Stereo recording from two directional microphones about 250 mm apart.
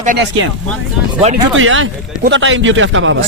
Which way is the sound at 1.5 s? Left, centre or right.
Right.